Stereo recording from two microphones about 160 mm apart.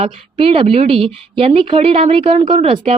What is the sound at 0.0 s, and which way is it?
A woman's voice, 35° right (ahead or behind).